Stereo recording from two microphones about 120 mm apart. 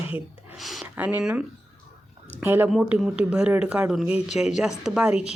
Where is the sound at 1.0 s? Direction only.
10° right (ahead or behind).